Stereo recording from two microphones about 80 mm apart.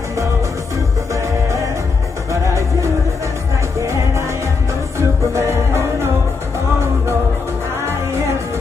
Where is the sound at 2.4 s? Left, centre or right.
Right.